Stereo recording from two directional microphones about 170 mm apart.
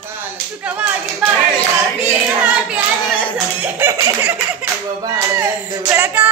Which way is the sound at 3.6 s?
10° right (ahead or behind).